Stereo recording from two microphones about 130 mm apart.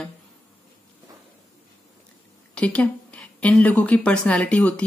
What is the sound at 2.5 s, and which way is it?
Speech, 10° left (ahead or behind).